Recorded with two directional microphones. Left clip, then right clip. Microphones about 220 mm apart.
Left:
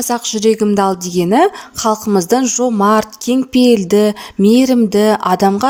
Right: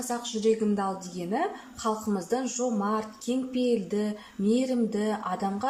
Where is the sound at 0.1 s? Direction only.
45° left (ahead or behind).